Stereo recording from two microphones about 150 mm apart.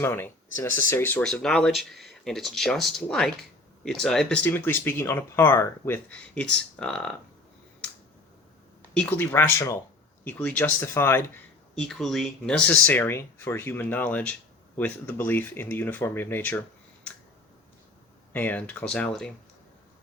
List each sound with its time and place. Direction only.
0.0 s speech: 15° left (ahead or behind)
9.0 s speech: 10° left (ahead or behind)
11.7 s speech: 5° left (ahead or behind)
18.3 s speech: 10° left (ahead or behind)